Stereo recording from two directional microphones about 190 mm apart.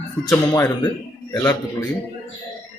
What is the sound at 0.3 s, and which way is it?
Speech, 15° left (ahead or behind).